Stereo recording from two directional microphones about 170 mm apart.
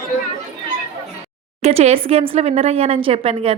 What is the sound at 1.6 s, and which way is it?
Speech, 40° right (ahead or behind).